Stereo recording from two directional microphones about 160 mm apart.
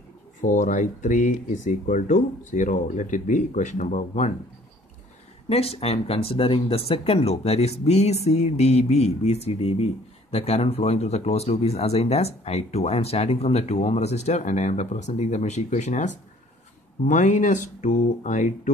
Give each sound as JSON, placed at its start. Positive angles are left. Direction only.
{"t": 0.4, "sound": "speech", "side_deg": 55}
{"t": 5.5, "sound": "speech", "side_deg": 40}